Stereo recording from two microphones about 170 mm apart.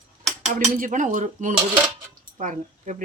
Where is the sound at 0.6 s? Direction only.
50° right (ahead or behind).